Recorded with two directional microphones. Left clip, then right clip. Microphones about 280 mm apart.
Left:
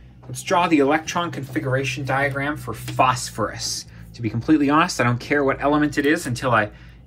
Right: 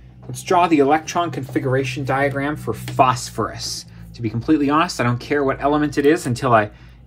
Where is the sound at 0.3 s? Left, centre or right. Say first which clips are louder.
Right 3 dB; right.